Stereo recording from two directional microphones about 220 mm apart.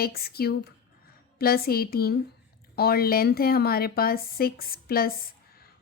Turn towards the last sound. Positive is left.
turn(degrees=45)  # may be behind; listen again after turning